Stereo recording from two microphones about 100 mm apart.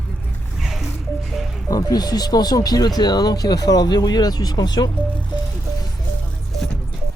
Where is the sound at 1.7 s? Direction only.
40° left (ahead or behind).